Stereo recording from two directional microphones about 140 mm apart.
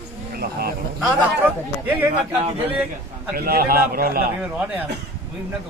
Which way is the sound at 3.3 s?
90° right.